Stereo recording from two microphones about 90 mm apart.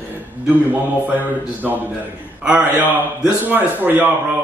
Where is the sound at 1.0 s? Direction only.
20° right (ahead or behind).